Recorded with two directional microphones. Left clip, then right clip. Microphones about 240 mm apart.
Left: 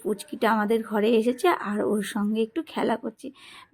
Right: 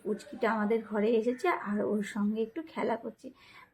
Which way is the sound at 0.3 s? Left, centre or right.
Left.